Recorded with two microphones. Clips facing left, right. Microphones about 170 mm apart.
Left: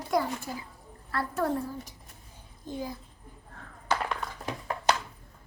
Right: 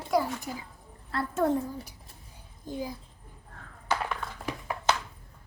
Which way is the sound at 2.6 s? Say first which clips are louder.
Right 1 dB; 10° right (ahead or behind).